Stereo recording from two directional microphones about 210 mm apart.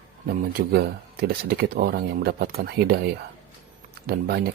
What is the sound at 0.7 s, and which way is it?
Speech, 50° right (ahead or behind).